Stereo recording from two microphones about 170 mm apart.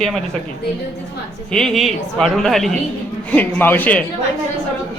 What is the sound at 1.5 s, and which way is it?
A man's voice, 5° left (ahead or behind).